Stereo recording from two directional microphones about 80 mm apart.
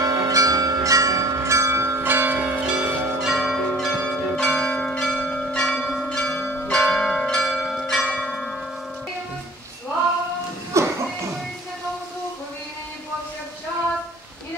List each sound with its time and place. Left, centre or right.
0.0 s church bell: right
2.6 s church bell: centre
10.8 s music: right